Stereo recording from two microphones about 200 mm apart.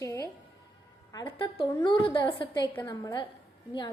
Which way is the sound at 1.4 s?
25° left (ahead or behind).